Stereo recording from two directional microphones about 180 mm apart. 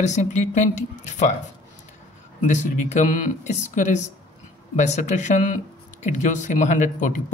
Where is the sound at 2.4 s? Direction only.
40° left (ahead or behind).